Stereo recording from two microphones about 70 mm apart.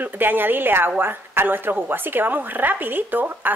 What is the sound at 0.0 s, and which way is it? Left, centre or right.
A woman's voice, right.